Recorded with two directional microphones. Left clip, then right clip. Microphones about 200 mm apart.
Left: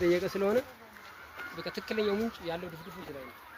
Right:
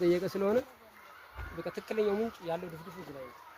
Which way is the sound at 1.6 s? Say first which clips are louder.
Right 1 dB; 35° right (ahead or behind).